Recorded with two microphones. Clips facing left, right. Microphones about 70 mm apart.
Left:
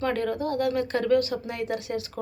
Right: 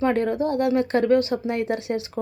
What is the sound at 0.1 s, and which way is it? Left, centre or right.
A woman's voice, right.